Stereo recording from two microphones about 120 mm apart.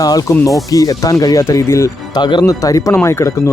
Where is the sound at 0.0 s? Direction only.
30° left (ahead or behind).